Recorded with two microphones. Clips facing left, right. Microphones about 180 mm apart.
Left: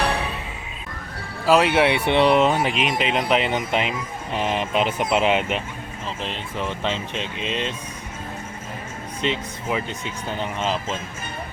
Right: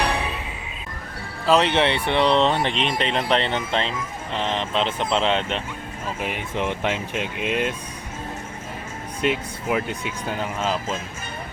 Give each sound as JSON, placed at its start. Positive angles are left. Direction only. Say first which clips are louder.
{"t": 1.5, "sound": "speech", "louder": "left 2 dB", "side_deg": 5}
{"t": 6.1, "sound": "speech", "louder": "right 3 dB", "side_deg": -10}
{"t": 9.2, "sound": "speech", "louder": "right 2 dB", "side_deg": -10}